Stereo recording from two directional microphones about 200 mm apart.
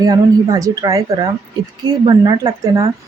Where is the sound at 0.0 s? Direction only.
20° right (ahead or behind).